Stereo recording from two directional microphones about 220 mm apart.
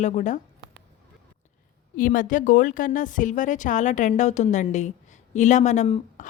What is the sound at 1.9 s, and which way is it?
Speech, 40° left (ahead or behind).